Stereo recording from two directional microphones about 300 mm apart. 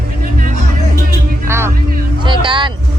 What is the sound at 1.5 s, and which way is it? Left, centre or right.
Music, centre.